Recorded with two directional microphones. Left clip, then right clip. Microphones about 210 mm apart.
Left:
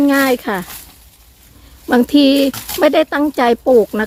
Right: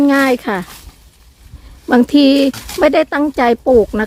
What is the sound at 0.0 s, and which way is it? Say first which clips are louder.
Speech: right 1 dB; 5° right (ahead or behind).